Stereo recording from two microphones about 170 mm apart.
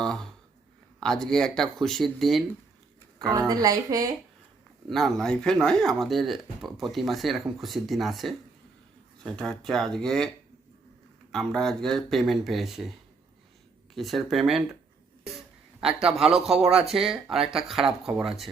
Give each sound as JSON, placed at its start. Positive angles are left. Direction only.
{"t": 0.0, "sound": "speech", "side_deg": 5}
{"t": 3.2, "sound": "speech", "side_deg": -20}
{"t": 4.9, "sound": "speech", "side_deg": 0}
{"t": 13.9, "sound": "speech", "side_deg": 0}
{"t": 15.2, "sound": "a sound", "side_deg": 0}
{"t": 16.0, "sound": "speech", "side_deg": -5}